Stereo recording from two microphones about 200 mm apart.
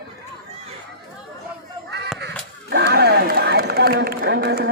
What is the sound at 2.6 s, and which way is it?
Run, 55° right (ahead or behind).